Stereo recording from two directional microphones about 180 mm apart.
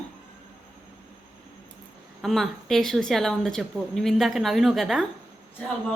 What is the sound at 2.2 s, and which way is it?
A woman's voice, centre (ahead or behind).